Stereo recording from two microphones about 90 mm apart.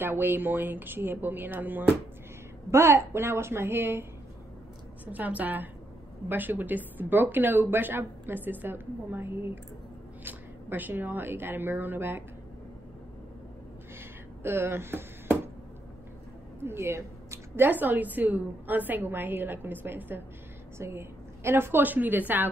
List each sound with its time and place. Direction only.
0.0 s speech: 25° right (ahead or behind)
5.0 s speech: 20° right (ahead or behind)
13.9 s a sound: 25° right (ahead or behind)
16.5 s a woman's voice: 25° right (ahead or behind)
17.6 s a woman's voice: 20° right (ahead or behind)